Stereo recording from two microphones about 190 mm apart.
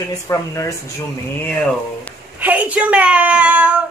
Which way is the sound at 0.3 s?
15° left (ahead or behind).